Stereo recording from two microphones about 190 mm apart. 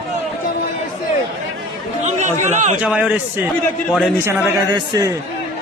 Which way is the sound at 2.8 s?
5° right (ahead or behind).